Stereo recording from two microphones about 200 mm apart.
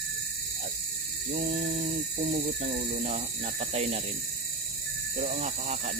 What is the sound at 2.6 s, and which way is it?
Speech, 35° right (ahead or behind).